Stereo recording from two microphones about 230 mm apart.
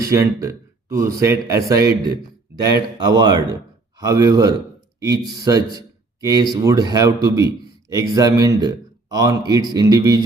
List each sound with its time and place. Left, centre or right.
0.0 s speech: centre